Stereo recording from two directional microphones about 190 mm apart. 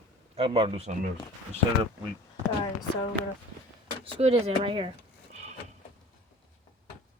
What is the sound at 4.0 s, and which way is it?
Speech, 35° right (ahead or behind).